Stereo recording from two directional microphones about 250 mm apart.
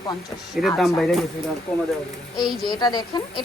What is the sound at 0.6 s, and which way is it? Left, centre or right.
Speech, centre.